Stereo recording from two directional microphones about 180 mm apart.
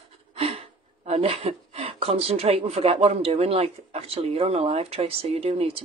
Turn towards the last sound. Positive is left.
turn(degrees=-35)  # may be behind; listen again after turning